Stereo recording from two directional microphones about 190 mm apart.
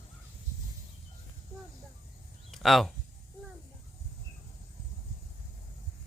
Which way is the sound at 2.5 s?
Centre (ahead or behind).